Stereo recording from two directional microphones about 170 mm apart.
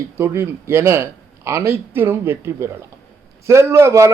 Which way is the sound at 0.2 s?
15° right (ahead or behind).